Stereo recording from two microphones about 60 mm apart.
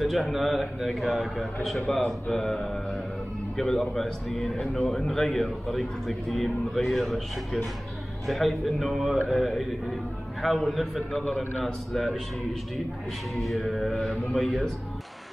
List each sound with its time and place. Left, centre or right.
0.0 s a man's voice: centre
2.0 s mantra: centre
3.8 s a man's voice: centre
13.3 s a man's voice: centre